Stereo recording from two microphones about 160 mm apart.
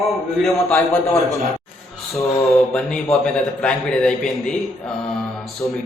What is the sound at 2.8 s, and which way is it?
A man's voice, 5° left (ahead or behind).